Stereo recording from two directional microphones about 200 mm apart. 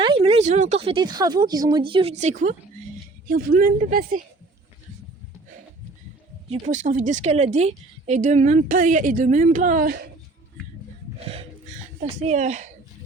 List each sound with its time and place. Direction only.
0.0 s speech: 25° right (ahead or behind)
3.2 s speech: 45° right (ahead or behind)
6.5 s a woman's voice: 35° right (ahead or behind)
11.3 s a sound: 30° right (ahead or behind)
12.2 s a woman's voice: 35° right (ahead or behind)